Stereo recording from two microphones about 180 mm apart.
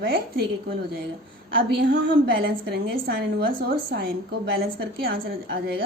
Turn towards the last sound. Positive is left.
turn(degrees=-60)  # may be behind; listen again after turning